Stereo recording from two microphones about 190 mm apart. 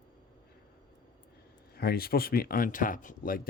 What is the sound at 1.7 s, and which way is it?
Speech, 55° left (ahead or behind).